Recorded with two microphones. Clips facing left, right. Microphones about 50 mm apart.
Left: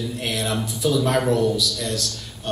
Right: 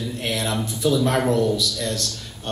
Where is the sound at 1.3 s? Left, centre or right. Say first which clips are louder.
Even; right.